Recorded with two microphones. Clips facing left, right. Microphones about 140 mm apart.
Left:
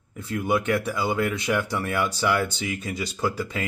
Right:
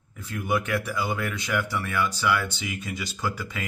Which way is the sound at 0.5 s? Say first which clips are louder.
Left 3 dB; 20° left (ahead or behind).